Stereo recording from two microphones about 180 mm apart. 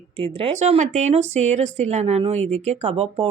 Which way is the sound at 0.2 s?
30° right (ahead or behind).